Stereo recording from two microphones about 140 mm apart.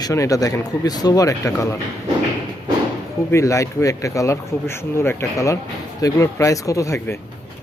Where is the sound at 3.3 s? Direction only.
20° left (ahead or behind).